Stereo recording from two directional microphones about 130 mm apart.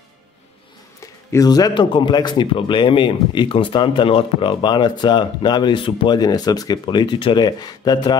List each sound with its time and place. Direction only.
1.3 s speech: 30° left (ahead or behind)